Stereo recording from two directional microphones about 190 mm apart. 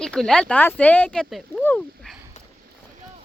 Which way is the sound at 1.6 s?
10° left (ahead or behind).